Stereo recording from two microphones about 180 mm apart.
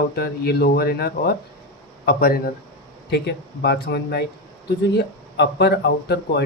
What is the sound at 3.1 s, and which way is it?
Speech, 65° left (ahead or behind).